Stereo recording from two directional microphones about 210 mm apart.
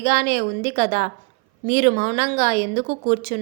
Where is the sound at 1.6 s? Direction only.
60° right (ahead or behind).